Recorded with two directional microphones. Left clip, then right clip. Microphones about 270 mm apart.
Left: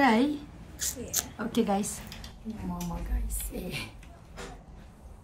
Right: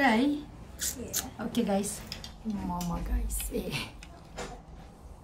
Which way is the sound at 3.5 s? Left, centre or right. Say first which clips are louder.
Right 3 dB; centre.